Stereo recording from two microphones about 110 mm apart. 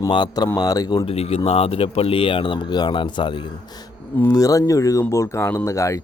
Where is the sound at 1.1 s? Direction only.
65° left (ahead or behind); by 3.5 s 45° left (ahead or behind).